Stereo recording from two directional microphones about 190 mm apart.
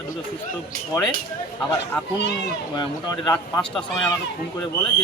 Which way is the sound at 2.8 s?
20° left (ahead or behind).